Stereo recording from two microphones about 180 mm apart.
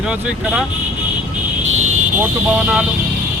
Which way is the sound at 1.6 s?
40° right (ahead or behind).